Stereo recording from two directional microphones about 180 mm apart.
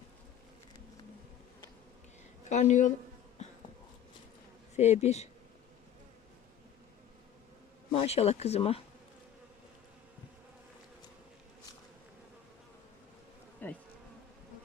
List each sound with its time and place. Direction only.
2.5 s speech: 40° left (ahead or behind)
4.8 s speech: 35° left (ahead or behind)
7.9 s speech: 35° left (ahead or behind)
13.6 s bee: 10° left (ahead or behind)